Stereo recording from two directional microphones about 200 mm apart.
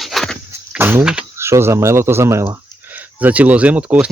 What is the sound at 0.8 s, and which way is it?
Speech, 10° right (ahead or behind).